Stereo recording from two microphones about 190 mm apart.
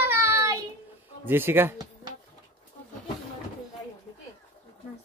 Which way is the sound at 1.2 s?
10° right (ahead or behind).